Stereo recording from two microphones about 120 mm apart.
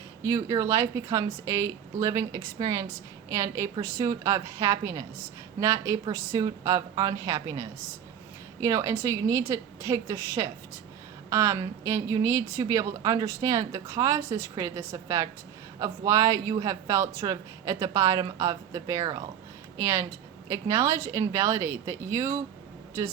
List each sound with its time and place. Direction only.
0.2 s a man's voice: 20° right (ahead or behind)